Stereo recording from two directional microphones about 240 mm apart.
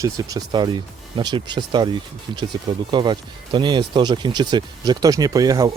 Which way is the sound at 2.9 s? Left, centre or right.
Centre.